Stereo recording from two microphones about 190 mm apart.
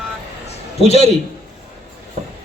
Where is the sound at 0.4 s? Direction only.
35° left (ahead or behind).